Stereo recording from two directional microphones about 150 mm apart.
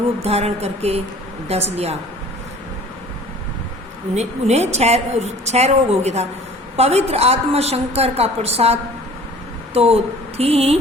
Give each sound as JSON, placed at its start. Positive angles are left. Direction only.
{"t": 0.2, "sound": "a woman's voice", "side_deg": -45}
{"t": 4.1, "sound": "a woman's voice", "side_deg": -45}